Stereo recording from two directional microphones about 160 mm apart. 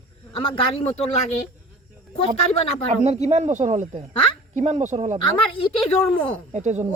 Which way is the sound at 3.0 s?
45° right (ahead or behind).